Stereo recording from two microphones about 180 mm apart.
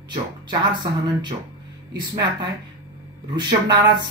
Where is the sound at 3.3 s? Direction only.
25° right (ahead or behind).